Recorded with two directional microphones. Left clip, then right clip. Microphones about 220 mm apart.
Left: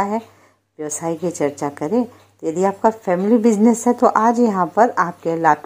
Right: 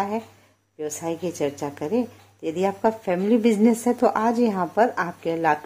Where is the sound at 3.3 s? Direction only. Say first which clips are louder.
Left 4 dB; centre (ahead or behind).